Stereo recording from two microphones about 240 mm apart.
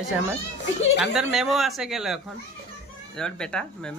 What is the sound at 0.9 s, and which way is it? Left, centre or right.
Speech, centre.